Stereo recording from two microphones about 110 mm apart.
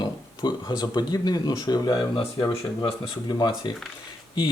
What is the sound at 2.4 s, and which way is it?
Speech, 30° left (ahead or behind).